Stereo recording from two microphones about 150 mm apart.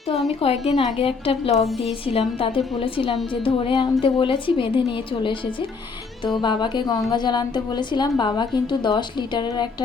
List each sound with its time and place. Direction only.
0.4 s a woman's voice: 35° left (ahead or behind)
1.5 s a woman's voice: centre (ahead or behind)
1.8 s a woman's voice: 40° left (ahead or behind)